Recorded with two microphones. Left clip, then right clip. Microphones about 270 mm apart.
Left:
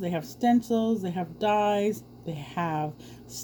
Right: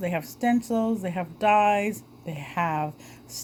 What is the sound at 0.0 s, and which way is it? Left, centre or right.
Speech, right.